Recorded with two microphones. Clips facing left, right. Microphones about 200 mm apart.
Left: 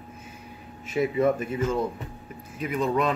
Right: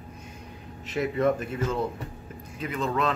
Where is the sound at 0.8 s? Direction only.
10° left (ahead or behind).